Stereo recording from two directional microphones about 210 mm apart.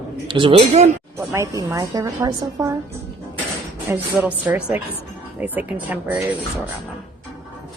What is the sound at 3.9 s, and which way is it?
A woman's voice, 5° right (ahead or behind).